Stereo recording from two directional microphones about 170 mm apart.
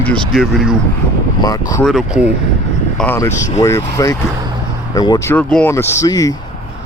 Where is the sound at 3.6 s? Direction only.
20° left (ahead or behind).